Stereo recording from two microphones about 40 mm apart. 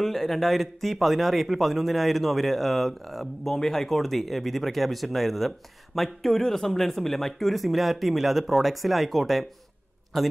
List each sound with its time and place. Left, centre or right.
0.0 s speech: centre